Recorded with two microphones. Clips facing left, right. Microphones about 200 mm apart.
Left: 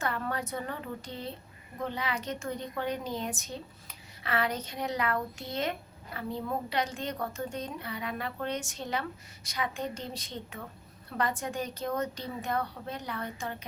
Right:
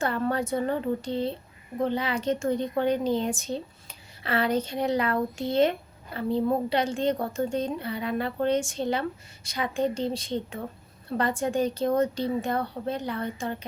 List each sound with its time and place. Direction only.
0.0 s a woman's voice: 30° right (ahead or behind)